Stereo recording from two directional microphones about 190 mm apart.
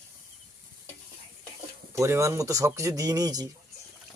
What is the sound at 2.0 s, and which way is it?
Speech, 15° right (ahead or behind).